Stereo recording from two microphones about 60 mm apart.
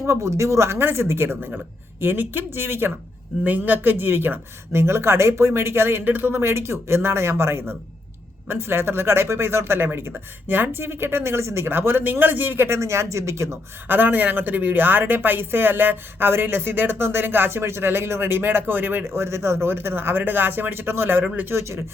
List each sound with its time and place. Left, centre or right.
0.0 s speech: right
3.4 s speech: right
12.6 s speech: right
13.8 s speech: right